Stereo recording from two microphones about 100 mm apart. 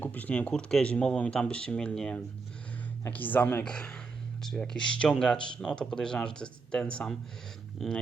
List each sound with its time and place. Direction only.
0.0 s speech: 15° left (ahead or behind)